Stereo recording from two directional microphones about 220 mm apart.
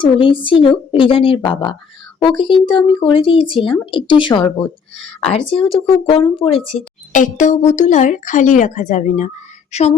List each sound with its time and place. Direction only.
0.0 s speech: 20° left (ahead or behind)